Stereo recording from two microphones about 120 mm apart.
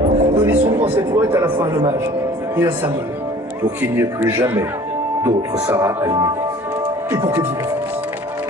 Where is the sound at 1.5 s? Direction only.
40° right (ahead or behind).